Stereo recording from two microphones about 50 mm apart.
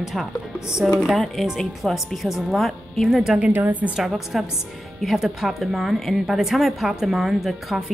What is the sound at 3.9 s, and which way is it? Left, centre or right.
A woman's voice, centre.